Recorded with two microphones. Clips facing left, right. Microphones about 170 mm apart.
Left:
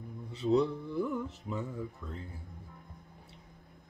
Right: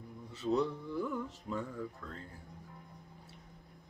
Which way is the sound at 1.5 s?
10° left (ahead or behind).